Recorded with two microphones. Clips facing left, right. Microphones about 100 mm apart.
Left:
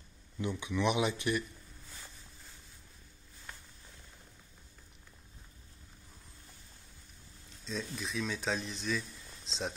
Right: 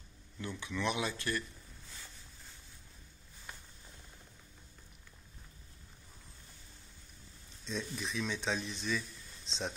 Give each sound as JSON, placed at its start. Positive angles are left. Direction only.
{"t": 0.4, "sound": "speech", "side_deg": 15}
{"t": 7.6, "sound": "speech", "side_deg": 0}